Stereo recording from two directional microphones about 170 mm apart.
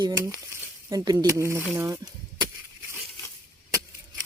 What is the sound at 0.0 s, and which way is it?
Speech, 15° right (ahead or behind).